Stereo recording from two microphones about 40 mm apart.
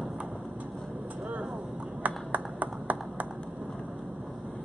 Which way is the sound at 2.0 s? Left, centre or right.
Right.